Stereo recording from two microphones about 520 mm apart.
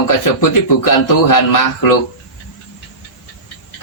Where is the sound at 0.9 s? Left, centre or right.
Left.